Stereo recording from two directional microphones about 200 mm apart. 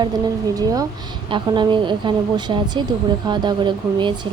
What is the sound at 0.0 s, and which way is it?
Speech, 20° right (ahead or behind).